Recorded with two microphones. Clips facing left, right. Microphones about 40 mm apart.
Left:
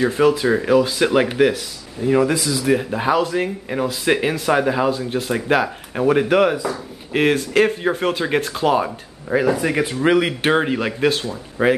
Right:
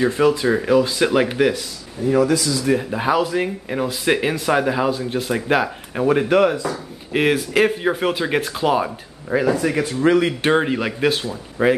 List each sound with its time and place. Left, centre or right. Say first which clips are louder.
0.0 s speech: left 1 dB; centre
2.0 s speech: even; left
2.5 s speech: left 1 dB; centre
2.9 s speech: even; centre
9.6 s speech: even; centre